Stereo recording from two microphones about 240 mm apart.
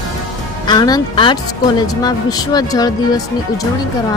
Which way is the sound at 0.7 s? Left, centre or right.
Centre.